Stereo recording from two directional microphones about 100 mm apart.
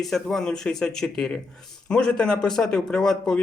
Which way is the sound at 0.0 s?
5° left (ahead or behind).